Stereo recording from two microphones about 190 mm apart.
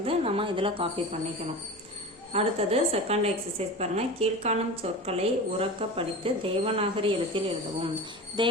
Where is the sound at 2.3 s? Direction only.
30° right (ahead or behind).